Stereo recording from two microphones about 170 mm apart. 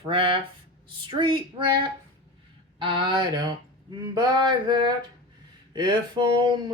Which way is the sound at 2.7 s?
30° right (ahead or behind).